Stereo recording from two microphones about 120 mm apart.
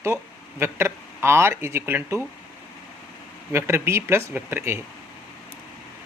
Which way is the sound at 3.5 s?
20° right (ahead or behind).